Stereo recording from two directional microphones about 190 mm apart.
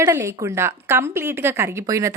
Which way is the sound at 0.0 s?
15° right (ahead or behind).